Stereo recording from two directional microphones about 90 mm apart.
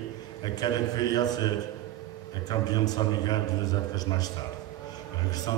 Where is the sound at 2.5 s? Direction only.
50° left (ahead or behind).